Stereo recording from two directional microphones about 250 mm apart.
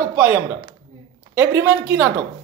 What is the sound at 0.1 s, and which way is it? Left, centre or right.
Speech, centre.